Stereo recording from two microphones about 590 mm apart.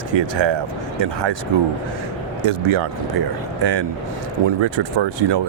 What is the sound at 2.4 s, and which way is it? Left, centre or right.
Speech, right.